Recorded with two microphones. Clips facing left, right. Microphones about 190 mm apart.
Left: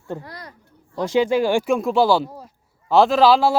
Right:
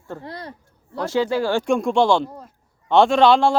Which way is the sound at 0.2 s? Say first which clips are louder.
Right 4 dB; 25° right (ahead or behind).